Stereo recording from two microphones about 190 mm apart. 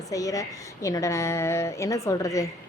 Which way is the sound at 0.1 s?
15° left (ahead or behind).